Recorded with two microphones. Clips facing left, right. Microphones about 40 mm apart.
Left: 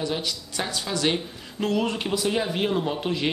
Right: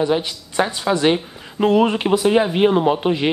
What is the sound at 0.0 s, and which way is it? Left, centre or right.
Speech, right.